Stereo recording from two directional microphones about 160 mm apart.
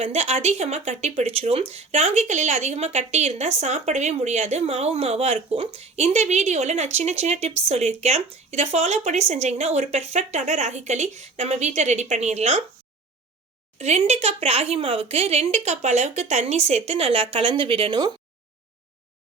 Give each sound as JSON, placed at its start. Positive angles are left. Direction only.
{"t": 0.0, "sound": "speech", "side_deg": -40}
{"t": 13.7, "sound": "speech", "side_deg": -45}